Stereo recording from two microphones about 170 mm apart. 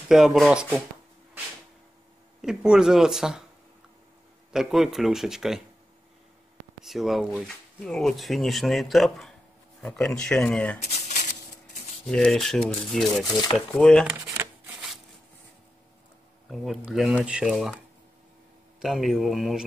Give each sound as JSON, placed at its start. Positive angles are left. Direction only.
{"t": 0.1, "sound": "speech", "side_deg": -5}
{"t": 2.4, "sound": "speech", "side_deg": -5}
{"t": 4.5, "sound": "speech", "side_deg": -5}
{"t": 6.8, "sound": "speech", "side_deg": 0}
{"t": 10.9, "sound": "a sound", "side_deg": 45}
{"t": 12.1, "sound": "speech", "side_deg": 5}
{"t": 13.4, "sound": "speech", "side_deg": 25}
{"t": 13.7, "sound": "speech", "side_deg": 5}
{"t": 14.0, "sound": "speech", "side_deg": -15}
{"t": 14.7, "sound": "a sound", "side_deg": 0}
{"t": 16.4, "sound": "speech", "side_deg": 0}
{"t": 18.8, "sound": "speech", "side_deg": 0}